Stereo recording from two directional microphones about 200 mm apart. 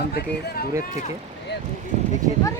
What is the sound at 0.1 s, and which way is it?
Speech, 50° left (ahead or behind).